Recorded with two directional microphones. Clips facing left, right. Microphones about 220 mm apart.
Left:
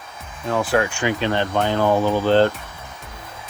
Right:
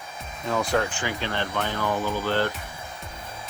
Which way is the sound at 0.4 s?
5° left (ahead or behind).